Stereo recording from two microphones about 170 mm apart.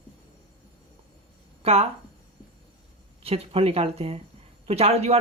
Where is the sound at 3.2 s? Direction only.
35° right (ahead or behind).